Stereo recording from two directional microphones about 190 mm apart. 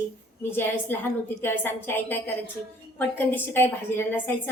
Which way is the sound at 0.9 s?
10° left (ahead or behind).